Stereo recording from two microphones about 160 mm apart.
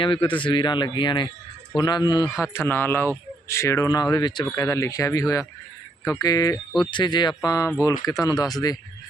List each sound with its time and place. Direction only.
0.0 s a man's voice: 30° left (ahead or behind)
2.4 s speech: 15° left (ahead or behind)